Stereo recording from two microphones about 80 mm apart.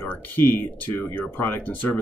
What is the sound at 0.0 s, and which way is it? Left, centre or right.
Speech, left.